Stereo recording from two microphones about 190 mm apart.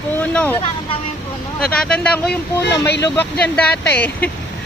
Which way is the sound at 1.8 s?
5° left (ahead or behind).